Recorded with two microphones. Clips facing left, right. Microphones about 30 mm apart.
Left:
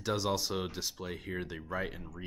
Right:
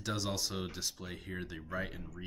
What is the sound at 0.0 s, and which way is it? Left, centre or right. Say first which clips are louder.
Speech: left 4 dB; centre.